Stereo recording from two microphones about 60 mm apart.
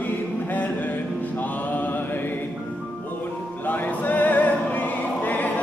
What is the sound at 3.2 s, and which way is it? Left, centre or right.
Music, left.